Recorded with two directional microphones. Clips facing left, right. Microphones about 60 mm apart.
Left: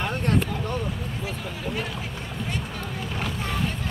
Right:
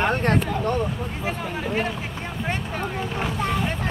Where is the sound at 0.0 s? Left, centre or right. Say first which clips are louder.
Right 4 dB; right.